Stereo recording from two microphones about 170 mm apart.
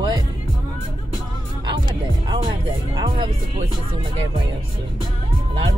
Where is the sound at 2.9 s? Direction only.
25° right (ahead or behind).